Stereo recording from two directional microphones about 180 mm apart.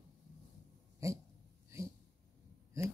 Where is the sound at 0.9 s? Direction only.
15° right (ahead or behind).